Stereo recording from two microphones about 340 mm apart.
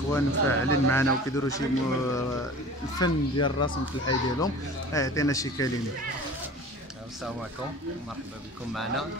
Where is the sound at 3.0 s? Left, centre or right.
Centre.